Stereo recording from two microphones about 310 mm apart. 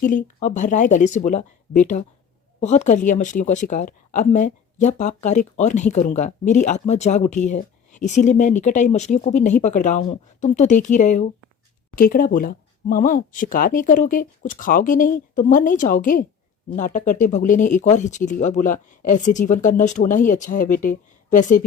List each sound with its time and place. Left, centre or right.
0.0 s speech: left